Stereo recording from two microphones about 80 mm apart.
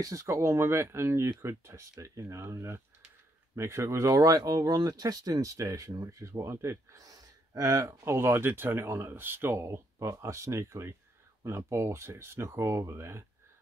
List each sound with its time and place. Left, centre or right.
0.0 s speech: right
8.0 s speech: right
9.6 s speech: right